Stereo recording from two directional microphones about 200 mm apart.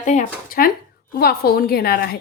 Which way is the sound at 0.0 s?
40° left (ahead or behind).